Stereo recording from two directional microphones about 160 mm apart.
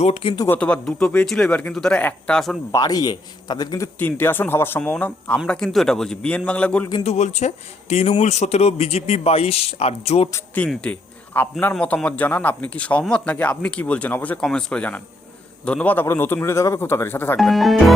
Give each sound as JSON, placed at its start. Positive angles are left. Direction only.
{"t": 0.0, "sound": "a man's voice", "side_deg": 40}
{"t": 0.3, "sound": "speech", "side_deg": 15}
{"t": 2.7, "sound": "speech", "side_deg": 25}
{"t": 3.9, "sound": "speech", "side_deg": 10}
{"t": 7.0, "sound": "a man's voice", "side_deg": 45}
{"t": 10.3, "sound": "speech", "side_deg": 10}
{"t": 17.3, "sound": "speech", "side_deg": 0}